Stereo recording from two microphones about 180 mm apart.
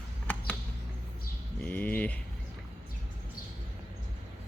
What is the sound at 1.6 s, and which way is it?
Speech, 10° left (ahead or behind).